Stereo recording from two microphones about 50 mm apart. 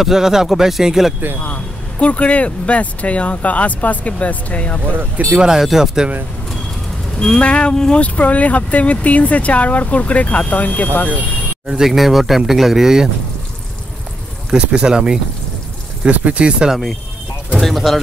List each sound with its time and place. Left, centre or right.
0.0 s speech: centre
2.0 s speech: left
4.9 s speech: right
5.4 s speech: centre
7.2 s speech: centre
7.7 s speech: centre
8.0 s speech: left
11.8 s speech: centre
14.6 s speech: right
17.6 s speech: centre